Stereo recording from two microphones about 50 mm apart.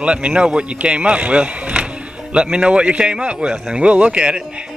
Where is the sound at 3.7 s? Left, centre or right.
Right.